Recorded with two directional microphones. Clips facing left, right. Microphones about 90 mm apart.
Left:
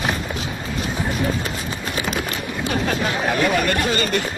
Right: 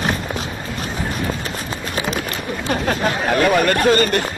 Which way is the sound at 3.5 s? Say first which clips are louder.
Right 5 dB; 45° right (ahead or behind).